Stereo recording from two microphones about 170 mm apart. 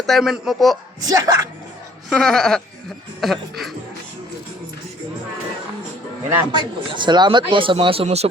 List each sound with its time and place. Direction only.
0.0 s a man's voice: centre (ahead or behind)
1.0 s speech: 20° right (ahead or behind)
2.0 s a man's voice: centre (ahead or behind)
6.5 s speech: 25° right (ahead or behind)